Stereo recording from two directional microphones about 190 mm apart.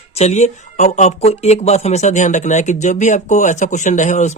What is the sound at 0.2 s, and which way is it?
Speech, 35° left (ahead or behind).